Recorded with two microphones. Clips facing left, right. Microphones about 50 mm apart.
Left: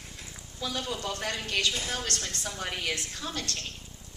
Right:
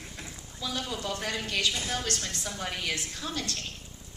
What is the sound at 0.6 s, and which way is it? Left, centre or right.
A woman's voice, centre.